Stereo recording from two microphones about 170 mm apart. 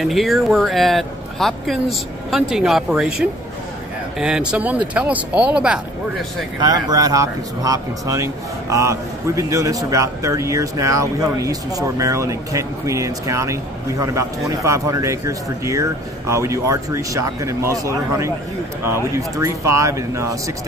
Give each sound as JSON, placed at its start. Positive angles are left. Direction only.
{"t": 0.0, "sound": "speech", "side_deg": 0}
{"t": 6.6, "sound": "speech", "side_deg": -25}